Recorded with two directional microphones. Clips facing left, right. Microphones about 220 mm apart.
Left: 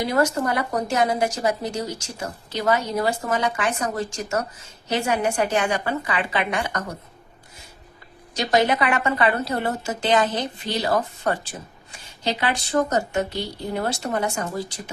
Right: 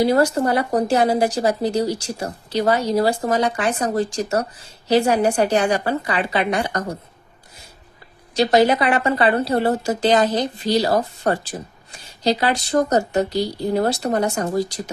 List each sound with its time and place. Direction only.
0.0 s speech: 35° right (ahead or behind)
8.4 s speech: 35° right (ahead or behind)